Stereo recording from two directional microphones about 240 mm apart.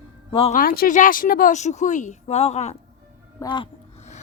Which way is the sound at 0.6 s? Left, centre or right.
Left.